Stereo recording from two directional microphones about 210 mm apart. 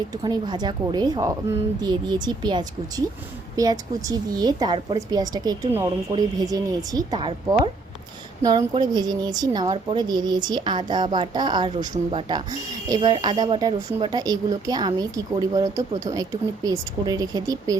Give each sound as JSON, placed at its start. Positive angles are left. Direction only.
{"t": 0.1, "sound": "a woman's voice", "side_deg": -20}